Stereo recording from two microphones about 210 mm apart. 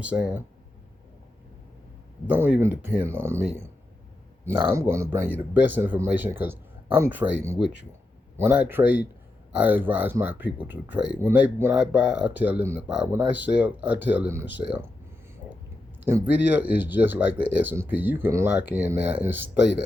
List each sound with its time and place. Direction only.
0.0 s speech: 5° right (ahead or behind)
2.2 s speech: 10° right (ahead or behind)
16.0 s speech: 10° right (ahead or behind)